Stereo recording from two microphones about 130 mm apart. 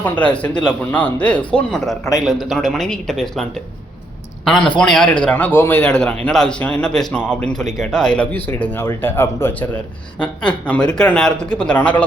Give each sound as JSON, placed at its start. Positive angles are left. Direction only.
{"t": 0.0, "sound": "a man's voice", "side_deg": 10}
{"t": 4.8, "sound": "a man's voice", "side_deg": 5}